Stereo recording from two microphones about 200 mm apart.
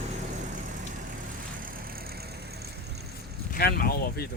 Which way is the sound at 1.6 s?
50° right (ahead or behind).